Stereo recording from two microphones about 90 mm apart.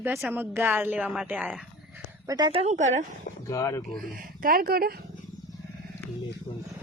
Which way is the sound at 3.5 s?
35° left (ahead or behind).